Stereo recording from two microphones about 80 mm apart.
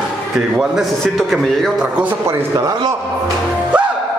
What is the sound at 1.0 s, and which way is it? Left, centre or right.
Speech, centre.